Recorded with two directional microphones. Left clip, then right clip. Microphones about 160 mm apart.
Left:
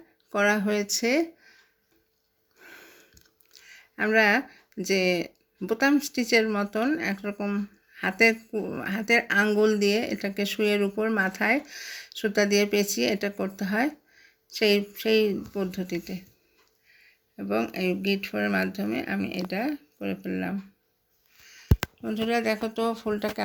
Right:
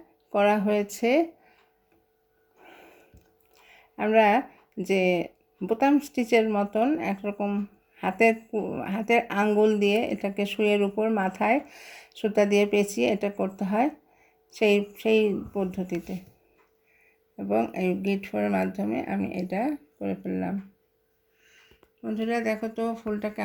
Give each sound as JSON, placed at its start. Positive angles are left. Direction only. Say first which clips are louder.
{"t": 0.3, "sound": "speech", "louder": "right 1 dB", "side_deg": -5}
{"t": 2.6, "sound": "a sound", "louder": "left 2 dB", "side_deg": -5}
{"t": 3.5, "sound": "speech", "louder": "left 1 dB", "side_deg": -5}
{"t": 17.3, "sound": "speech", "louder": "right 2 dB", "side_deg": -5}
{"t": 21.4, "sound": "a sound", "louder": "left 6 dB", "side_deg": -10}
{"t": 22.0, "sound": "speech", "louder": "left 1 dB", "side_deg": 0}
{"t": 22.9, "sound": "speech", "louder": "left 2 dB", "side_deg": 20}